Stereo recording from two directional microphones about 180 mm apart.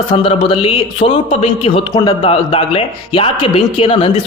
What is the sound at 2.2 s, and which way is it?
A man's voice, 30° left (ahead or behind).